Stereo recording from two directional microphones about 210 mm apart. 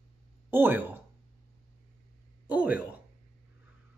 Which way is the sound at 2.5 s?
5° right (ahead or behind).